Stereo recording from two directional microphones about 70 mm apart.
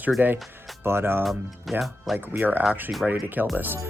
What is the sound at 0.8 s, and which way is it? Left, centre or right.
Speech, right.